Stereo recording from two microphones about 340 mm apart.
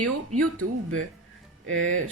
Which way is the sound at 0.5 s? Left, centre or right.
Right.